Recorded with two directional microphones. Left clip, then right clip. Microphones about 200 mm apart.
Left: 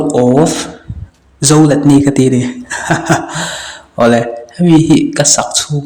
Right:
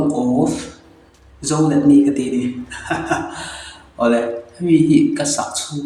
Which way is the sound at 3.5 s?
45° left (ahead or behind).